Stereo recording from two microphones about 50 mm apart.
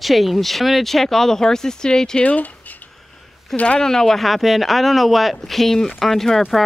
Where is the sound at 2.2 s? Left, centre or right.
Left.